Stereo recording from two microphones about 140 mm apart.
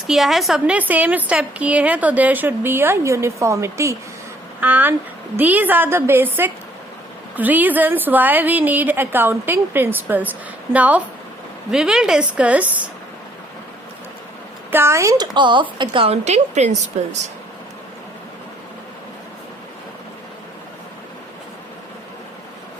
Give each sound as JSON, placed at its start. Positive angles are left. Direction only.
{"t": 0.1, "sound": "a woman's voice", "side_deg": 0}
{"t": 14.7, "sound": "speech", "side_deg": -15}
{"t": 15.4, "sound": "a woman's voice", "side_deg": -35}